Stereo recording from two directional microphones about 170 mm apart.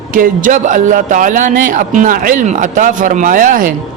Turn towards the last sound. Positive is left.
turn(degrees=-50)  # may be behind; listen again after turning